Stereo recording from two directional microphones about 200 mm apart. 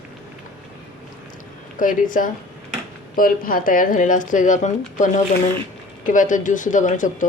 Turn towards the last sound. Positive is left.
turn(degrees=40)  # may be behind; listen again after turning